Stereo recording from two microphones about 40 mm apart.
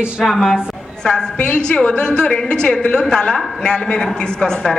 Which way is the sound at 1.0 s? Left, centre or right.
Left.